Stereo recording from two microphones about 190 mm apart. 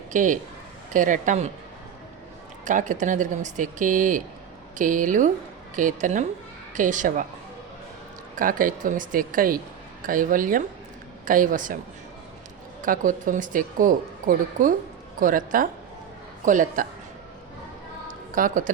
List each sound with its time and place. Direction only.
0.1 s a man's voice: 40° right (ahead or behind)
2.6 s speech: 40° right (ahead or behind)
8.4 s speech: 45° right (ahead or behind)
12.8 s speech: 45° right (ahead or behind)
18.3 s speech: 45° right (ahead or behind)